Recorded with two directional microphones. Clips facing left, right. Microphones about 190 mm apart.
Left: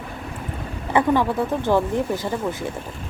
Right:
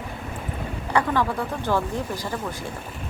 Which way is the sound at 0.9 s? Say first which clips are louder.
Left 4 dB; 20° left (ahead or behind).